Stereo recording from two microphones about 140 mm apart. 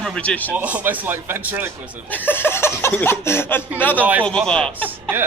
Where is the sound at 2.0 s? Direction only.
15° left (ahead or behind).